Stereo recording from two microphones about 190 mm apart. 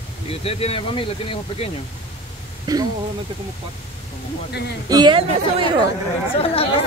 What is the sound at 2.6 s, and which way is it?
Speech, 20° right (ahead or behind).